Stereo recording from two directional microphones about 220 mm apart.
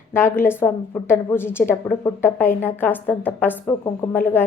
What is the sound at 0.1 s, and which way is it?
A woman's voice, 10° left (ahead or behind).